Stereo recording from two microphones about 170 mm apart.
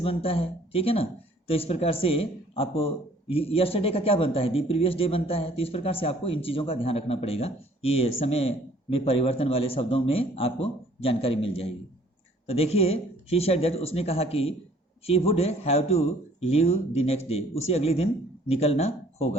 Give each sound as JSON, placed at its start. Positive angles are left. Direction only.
{"t": 0.0, "sound": "a man's voice", "side_deg": 35}